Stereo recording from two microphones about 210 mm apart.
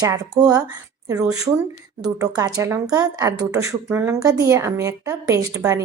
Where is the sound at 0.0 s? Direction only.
20° right (ahead or behind).